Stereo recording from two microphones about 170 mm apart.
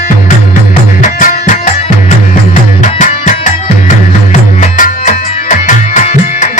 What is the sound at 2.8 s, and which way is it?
Music, 50° left (ahead or behind).